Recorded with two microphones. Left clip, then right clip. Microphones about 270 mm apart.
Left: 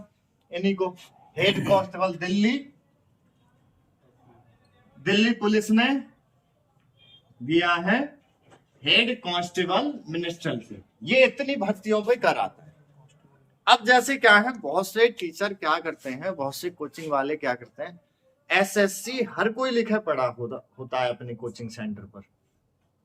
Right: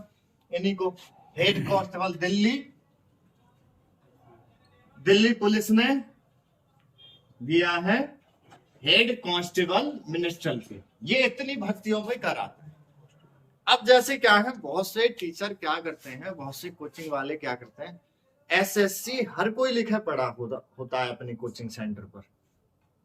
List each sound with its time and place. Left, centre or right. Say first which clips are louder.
0.5 s speech: left 1 dB; centre
5.0 s speech: right 2 dB; centre
7.4 s speech: left 2 dB; centre
13.7 s speech: left 1 dB; centre